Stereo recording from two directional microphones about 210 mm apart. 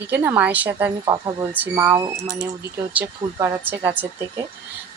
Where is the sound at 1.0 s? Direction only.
20° right (ahead or behind).